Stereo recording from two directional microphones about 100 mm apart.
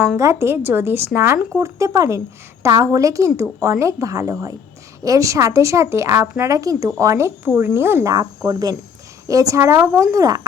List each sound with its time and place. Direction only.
0.2 s a woman's voice: 30° right (ahead or behind)
6.5 s a woman's voice: 35° right (ahead or behind)
8.4 s a woman's voice: 40° right (ahead or behind)